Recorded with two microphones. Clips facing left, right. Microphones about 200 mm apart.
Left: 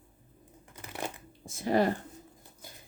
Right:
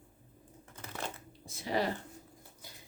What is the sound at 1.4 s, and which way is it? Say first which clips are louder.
Speech: left 6 dB; 50° left (ahead or behind).